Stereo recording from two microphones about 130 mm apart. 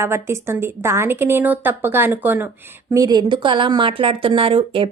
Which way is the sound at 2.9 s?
30° right (ahead or behind).